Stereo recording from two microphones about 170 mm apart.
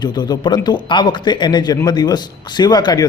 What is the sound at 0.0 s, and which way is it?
A man's voice, 25° left (ahead or behind).